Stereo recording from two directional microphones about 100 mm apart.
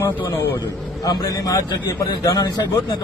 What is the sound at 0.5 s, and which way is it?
Speech, 40° left (ahead or behind).